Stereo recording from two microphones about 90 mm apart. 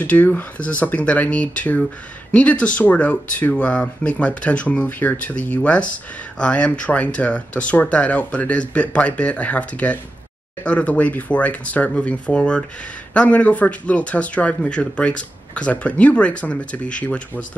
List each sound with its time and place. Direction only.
0.0 s speech: 20° left (ahead or behind)